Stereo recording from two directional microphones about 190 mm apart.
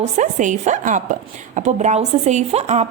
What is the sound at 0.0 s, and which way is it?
A woman's voice, 40° right (ahead or behind).